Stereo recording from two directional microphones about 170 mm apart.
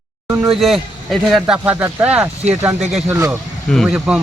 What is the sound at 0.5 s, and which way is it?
Speech, centre (ahead or behind).